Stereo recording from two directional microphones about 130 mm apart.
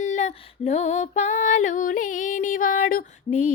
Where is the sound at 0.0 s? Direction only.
65° left (ahead or behind).